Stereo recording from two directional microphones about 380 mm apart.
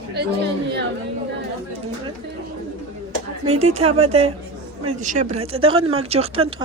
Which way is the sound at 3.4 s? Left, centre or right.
Centre.